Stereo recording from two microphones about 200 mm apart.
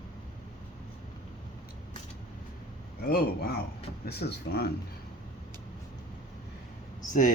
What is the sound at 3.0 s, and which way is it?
A man's voice, 50° left (ahead or behind).